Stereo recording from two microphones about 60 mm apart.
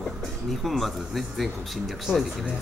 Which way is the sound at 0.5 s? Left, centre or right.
Centre.